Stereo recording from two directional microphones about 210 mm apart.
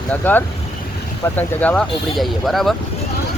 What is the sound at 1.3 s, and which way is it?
Speech, 10° left (ahead or behind).